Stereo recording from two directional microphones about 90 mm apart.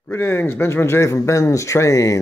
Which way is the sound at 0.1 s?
25° left (ahead or behind).